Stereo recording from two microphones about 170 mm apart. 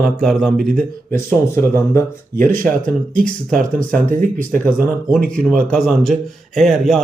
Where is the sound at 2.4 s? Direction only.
55° right (ahead or behind).